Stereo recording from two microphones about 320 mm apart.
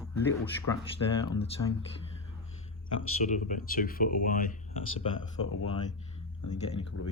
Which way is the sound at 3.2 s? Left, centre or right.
Left.